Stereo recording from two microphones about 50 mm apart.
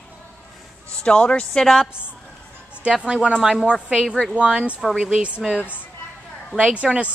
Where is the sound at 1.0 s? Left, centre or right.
Left.